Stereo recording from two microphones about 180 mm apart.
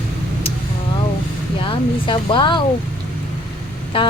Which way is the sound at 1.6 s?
30° left (ahead or behind).